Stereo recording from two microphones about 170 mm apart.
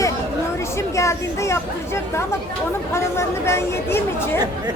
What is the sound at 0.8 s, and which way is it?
Speech, 15° left (ahead or behind).